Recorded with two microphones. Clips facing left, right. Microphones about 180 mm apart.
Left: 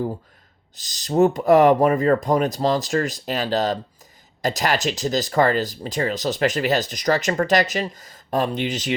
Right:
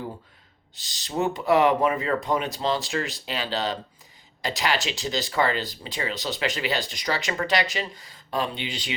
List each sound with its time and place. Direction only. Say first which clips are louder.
0.8 s speech: left 10 dB; 40° left (ahead or behind)